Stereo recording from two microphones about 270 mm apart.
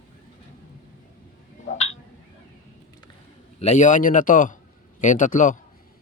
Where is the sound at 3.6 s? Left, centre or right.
Left.